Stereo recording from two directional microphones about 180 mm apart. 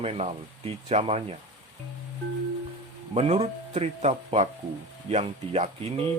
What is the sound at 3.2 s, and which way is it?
Speech, 35° right (ahead or behind).